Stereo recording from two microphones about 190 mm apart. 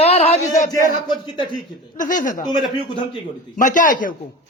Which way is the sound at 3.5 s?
45° left (ahead or behind).